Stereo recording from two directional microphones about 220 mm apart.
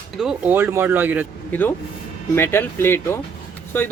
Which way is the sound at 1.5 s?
5° left (ahead or behind).